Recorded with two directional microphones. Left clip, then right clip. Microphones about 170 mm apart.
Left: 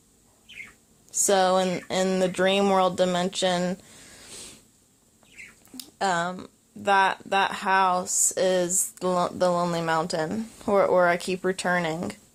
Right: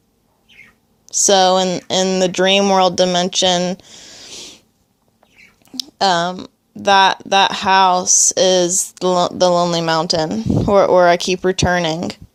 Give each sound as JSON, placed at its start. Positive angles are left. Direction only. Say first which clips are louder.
{"t": 1.1, "sound": "speech", "louder": "right 9 dB", "side_deg": -40}
{"t": 5.7, "sound": "speech", "louder": "right 10 dB", "side_deg": -50}